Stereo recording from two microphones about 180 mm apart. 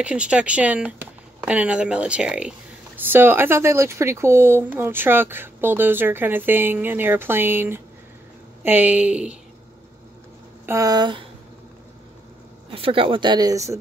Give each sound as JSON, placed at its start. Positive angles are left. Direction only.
{"t": 0.0, "sound": "speech", "side_deg": -5}
{"t": 10.7, "sound": "speech", "side_deg": -20}
{"t": 12.7, "sound": "speech", "side_deg": -30}